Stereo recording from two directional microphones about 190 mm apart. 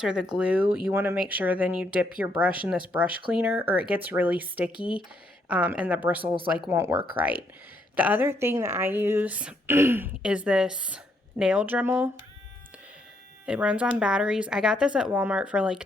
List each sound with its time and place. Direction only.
0.0 s speech: 5° right (ahead or behind)
4.7 s speech: 25° left (ahead or behind)
5.5 s speech: 5° right (ahead or behind)
13.4 s speech: 5° right (ahead or behind)